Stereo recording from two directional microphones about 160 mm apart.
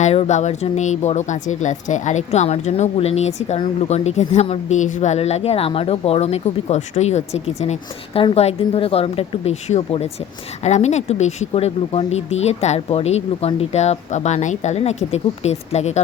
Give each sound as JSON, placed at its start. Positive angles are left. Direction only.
{"t": 0.0, "sound": "speech", "side_deg": 45}